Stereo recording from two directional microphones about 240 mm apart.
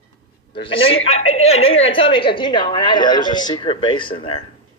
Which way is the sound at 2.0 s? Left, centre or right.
Left.